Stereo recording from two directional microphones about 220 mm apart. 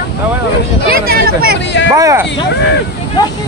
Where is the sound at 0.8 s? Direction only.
45° right (ahead or behind).